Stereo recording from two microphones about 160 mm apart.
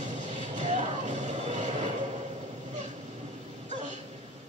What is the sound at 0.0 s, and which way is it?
Music, 45° right (ahead or behind).